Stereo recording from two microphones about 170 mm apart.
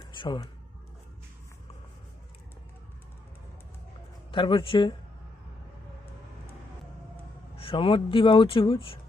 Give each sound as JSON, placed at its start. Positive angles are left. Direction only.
{"t": 0.2, "sound": "a man's voice", "side_deg": 25}
{"t": 4.3, "sound": "a man's voice", "side_deg": 30}
{"t": 7.5, "sound": "speech", "side_deg": 30}